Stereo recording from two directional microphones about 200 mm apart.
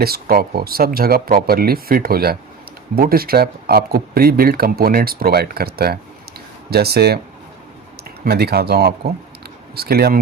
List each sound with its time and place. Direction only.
0.0 s speech: 50° right (ahead or behind)
8.2 s speech: 50° right (ahead or behind)